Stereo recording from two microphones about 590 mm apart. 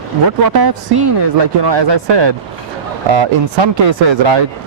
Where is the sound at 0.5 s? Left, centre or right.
Right.